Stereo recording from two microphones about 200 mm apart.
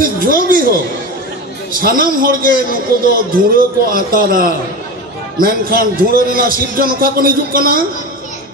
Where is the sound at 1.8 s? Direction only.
45° right (ahead or behind).